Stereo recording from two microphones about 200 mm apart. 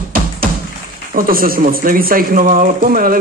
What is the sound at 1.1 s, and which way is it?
A man's voice, 45° right (ahead or behind).